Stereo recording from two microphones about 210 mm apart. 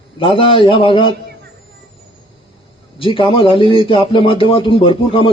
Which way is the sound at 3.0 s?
25° left (ahead or behind).